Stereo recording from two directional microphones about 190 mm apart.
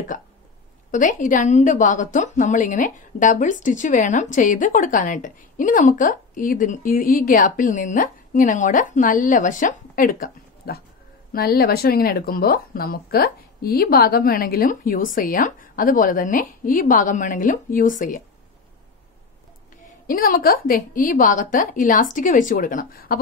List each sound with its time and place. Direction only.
0.9 s a woman's voice: 45° left (ahead or behind)
20.1 s a woman's voice: 50° left (ahead or behind)